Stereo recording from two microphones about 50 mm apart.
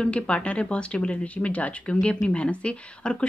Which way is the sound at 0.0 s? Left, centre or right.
Left.